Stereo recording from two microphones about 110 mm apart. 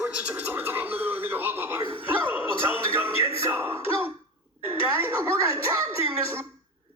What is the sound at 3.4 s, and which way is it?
Speech, 15° right (ahead or behind).